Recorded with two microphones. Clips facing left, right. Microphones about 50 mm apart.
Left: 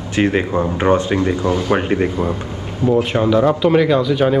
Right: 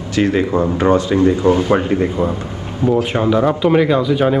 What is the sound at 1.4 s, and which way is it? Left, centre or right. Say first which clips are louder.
Speech: right 4 dB; right.